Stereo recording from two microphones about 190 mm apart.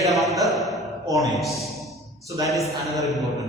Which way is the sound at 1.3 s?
Centre (ahead or behind).